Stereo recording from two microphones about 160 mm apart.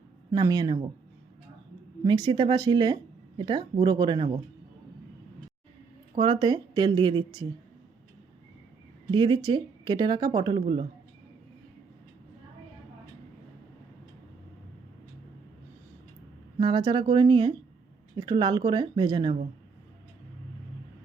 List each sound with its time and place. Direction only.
0.3 s speech: 25° right (ahead or behind)
2.0 s speech: 25° right (ahead or behind)
6.1 s speech: 30° right (ahead or behind)
9.1 s speech: 30° right (ahead or behind)
16.6 s speech: 30° right (ahead or behind)